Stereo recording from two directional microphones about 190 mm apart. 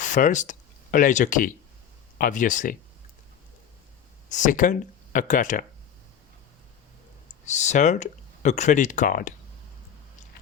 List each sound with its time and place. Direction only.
0.0 s speech: 40° left (ahead or behind)
4.3 s speech: 40° left (ahead or behind)
7.4 s speech: 40° left (ahead or behind)